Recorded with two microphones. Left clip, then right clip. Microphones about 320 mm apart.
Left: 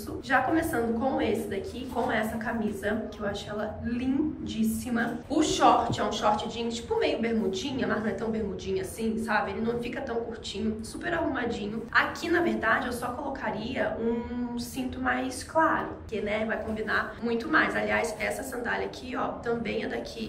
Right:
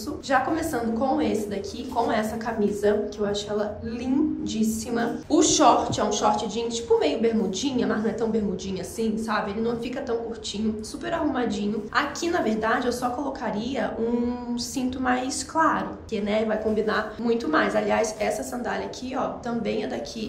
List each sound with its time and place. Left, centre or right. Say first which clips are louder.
0.3 s a woman's voice: right 2 dB; centre
14.5 s a woman's voice: right 6 dB; right